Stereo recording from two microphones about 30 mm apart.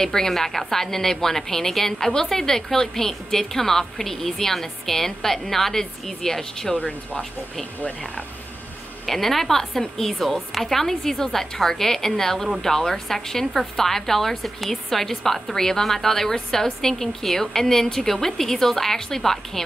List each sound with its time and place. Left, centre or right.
0.0 s a woman's voice: centre
0.3 s a woman's voice: centre
9.0 s a woman's voice: centre
10.1 s a woman's voice: centre